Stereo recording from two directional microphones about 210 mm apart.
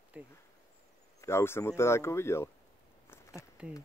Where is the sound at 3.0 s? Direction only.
15° left (ahead or behind).